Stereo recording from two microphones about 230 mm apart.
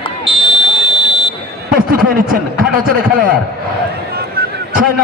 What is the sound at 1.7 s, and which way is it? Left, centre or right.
Speech, right.